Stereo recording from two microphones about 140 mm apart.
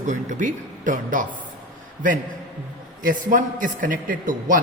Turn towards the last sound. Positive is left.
turn(degrees=-70)  # may be behind; listen again after turning